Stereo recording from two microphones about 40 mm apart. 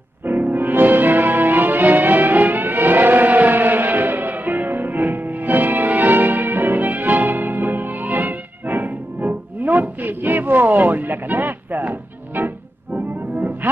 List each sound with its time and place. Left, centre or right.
0.2 s music: right